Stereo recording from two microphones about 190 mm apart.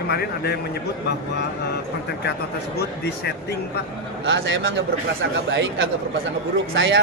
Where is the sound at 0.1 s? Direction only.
55° left (ahead or behind).